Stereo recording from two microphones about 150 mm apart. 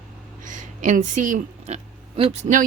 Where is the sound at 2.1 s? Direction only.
40° right (ahead or behind).